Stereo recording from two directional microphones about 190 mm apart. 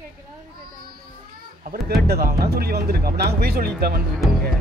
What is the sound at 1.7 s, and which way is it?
Speech, 55° right (ahead or behind).